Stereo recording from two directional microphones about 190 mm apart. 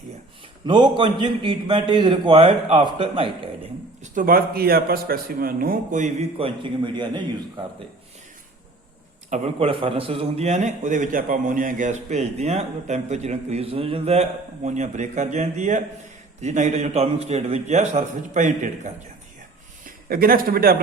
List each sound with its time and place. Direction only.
0.6 s a man's voice: 25° right (ahead or behind)
4.0 s speech: 45° right (ahead or behind)
6.4 s a man's voice: 25° right (ahead or behind)
9.3 s a man's voice: 35° right (ahead or behind)
19.8 s speech: 50° right (ahead or behind)